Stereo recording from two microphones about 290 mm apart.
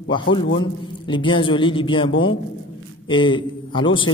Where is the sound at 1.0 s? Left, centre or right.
Centre.